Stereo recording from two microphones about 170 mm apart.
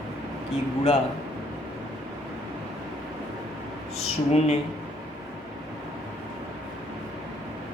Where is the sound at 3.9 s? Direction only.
40° left (ahead or behind).